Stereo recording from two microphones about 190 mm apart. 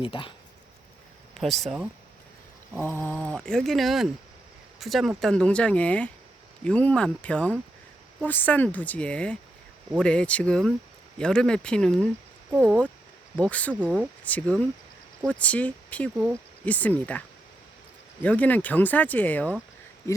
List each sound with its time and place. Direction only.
0.0 s speech: 25° left (ahead or behind)
1.3 s speech: centre (ahead or behind)
2.7 s speech: 10° left (ahead or behind)
12.5 s speech: 10° right (ahead or behind)
13.4 s speech: 5° left (ahead or behind)
16.1 s speech: 10° right (ahead or behind)
16.6 s speech: 10° left (ahead or behind)